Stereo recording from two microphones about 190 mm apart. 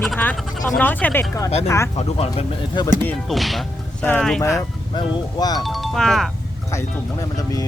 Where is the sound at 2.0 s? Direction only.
30° left (ahead or behind).